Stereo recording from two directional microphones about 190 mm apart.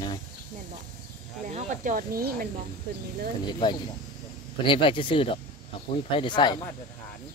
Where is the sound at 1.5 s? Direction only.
40° right (ahead or behind).